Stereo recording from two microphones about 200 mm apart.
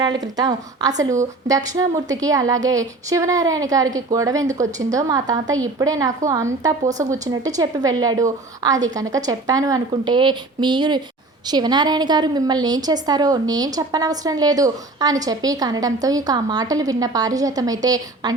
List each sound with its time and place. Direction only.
0.0 s a woman's voice: 20° right (ahead or behind)